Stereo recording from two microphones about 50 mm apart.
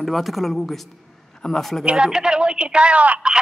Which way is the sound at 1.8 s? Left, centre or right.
Centre.